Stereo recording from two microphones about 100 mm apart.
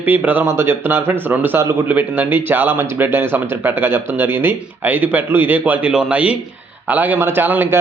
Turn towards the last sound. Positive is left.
turn(degrees=-20)  # may be behind; listen again after turning